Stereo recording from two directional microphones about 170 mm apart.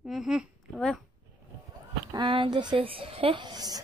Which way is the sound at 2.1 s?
30° right (ahead or behind).